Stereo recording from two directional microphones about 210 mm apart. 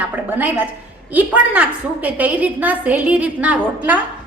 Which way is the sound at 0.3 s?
10° right (ahead or behind).